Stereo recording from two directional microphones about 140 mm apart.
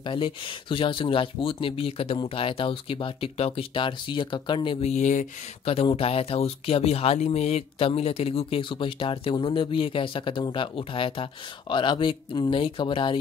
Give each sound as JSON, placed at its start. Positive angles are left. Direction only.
{"t": 0.0, "sound": "speech", "side_deg": 35}
{"t": 4.8, "sound": "speech", "side_deg": 55}
{"t": 5.7, "sound": "speech", "side_deg": 45}